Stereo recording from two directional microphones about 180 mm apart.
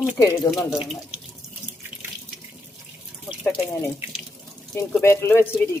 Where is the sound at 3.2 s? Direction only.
Centre (ahead or behind).